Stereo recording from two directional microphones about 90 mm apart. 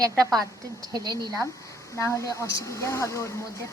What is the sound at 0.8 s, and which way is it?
Speech, 45° right (ahead or behind).